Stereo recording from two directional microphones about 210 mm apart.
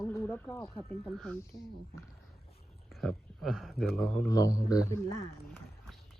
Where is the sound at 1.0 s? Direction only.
Centre (ahead or behind).